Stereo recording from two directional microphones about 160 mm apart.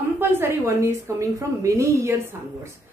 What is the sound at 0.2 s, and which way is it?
A woman's voice, 15° right (ahead or behind).